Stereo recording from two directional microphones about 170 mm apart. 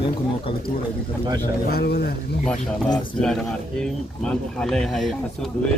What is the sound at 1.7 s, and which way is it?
Speech, 70° left (ahead or behind).